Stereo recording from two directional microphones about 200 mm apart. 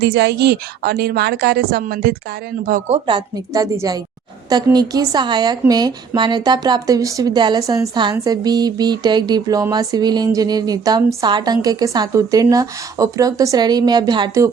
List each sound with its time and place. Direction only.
0.0 s a woman's voice: 55° right (ahead or behind); by 3.0 s 40° right (ahead or behind)
3.1 s a woman's voice: 20° right (ahead or behind)